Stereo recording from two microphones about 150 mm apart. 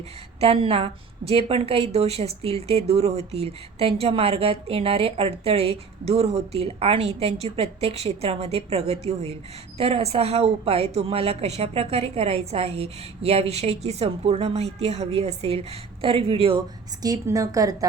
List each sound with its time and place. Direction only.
0.3 s a woman's voice: 40° right (ahead or behind); by 17.8 s 25° right (ahead or behind)